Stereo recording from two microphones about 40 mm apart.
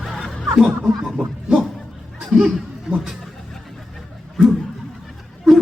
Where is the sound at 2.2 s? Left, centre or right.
Right.